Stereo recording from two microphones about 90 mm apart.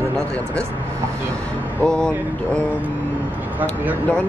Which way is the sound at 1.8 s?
10° left (ahead or behind).